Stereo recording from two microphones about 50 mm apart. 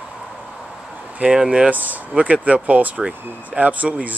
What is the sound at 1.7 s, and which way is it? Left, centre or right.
Speech, right.